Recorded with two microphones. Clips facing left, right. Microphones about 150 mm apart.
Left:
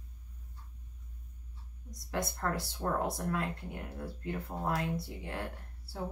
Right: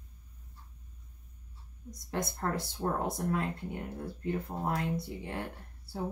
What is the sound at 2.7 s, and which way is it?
Speech, 25° right (ahead or behind).